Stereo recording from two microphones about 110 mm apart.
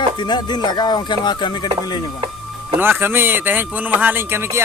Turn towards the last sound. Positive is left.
turn(degrees=-20)  # may be behind; listen again after turning